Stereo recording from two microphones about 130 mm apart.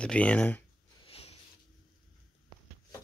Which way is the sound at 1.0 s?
50° left (ahead or behind).